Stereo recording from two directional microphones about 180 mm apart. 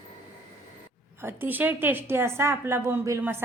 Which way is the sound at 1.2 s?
10° right (ahead or behind).